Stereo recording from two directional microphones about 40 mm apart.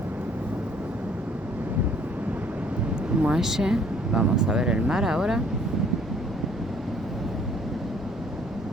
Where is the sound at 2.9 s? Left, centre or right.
Right.